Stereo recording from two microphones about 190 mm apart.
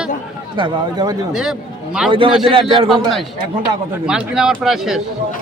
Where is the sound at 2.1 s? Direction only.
25° right (ahead or behind).